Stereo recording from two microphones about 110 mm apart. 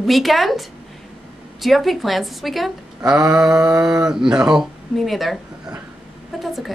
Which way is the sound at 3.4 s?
35° right (ahead or behind).